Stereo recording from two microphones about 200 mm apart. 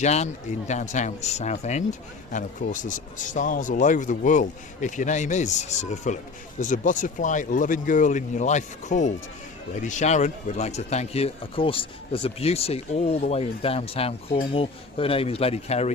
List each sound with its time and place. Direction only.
0.0 s speech: 35° left (ahead or behind)